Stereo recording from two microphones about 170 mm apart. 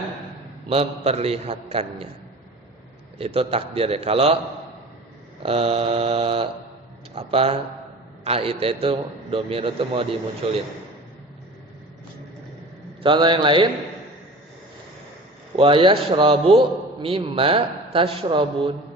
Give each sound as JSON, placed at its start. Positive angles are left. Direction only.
{"t": 0.7, "sound": "a man's voice", "side_deg": -35}
{"t": 3.2, "sound": "a man's voice", "side_deg": -35}
{"t": 5.4, "sound": "a man's voice", "side_deg": -35}
{"t": 13.0, "sound": "a man's voice", "side_deg": -30}
{"t": 15.5, "sound": "a man's voice", "side_deg": -30}